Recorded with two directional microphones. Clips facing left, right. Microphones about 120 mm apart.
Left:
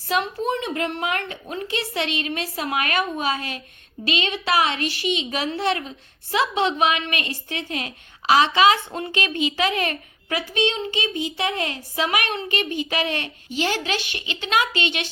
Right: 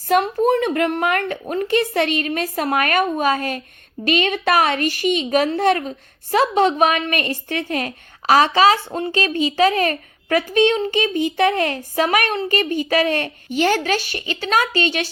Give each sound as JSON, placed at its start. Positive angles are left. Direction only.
{"t": 0.1, "sound": "a child's voice", "side_deg": -50}